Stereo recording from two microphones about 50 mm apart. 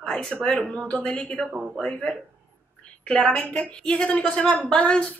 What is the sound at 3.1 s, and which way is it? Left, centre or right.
A woman's voice, centre.